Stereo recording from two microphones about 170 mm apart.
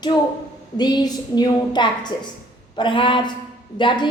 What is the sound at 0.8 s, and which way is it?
A woman's voice, 25° left (ahead or behind).